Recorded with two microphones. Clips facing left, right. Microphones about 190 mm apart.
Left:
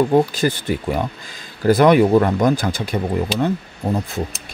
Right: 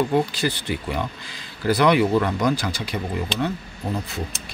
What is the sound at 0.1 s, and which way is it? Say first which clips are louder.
Speech: left 5 dB; 45° left (ahead or behind).